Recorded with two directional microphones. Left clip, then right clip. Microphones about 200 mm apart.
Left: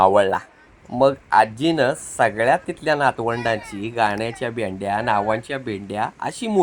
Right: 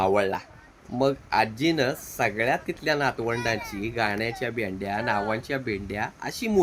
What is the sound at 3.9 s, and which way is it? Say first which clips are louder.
Speech: left 6 dB; 5° left (ahead or behind).